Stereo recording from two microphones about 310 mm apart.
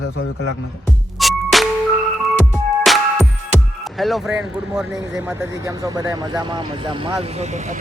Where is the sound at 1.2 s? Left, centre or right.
Centre.